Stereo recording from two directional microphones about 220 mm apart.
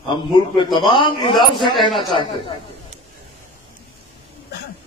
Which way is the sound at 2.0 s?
20° left (ahead or behind).